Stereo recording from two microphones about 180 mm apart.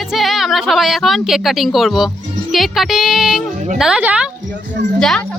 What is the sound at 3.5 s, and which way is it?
Speech, 45° right (ahead or behind).